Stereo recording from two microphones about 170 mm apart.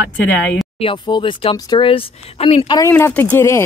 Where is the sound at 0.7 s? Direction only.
30° left (ahead or behind).